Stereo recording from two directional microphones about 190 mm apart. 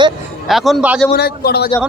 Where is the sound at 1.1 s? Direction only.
55° left (ahead or behind).